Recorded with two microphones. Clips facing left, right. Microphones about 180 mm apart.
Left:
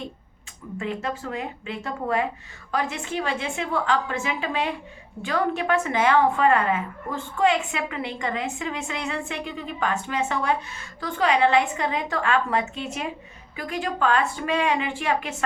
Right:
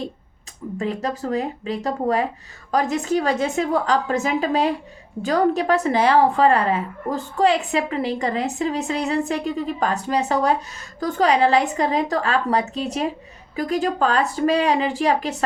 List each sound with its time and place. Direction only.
0.8 s a woman's voice: 40° right (ahead or behind)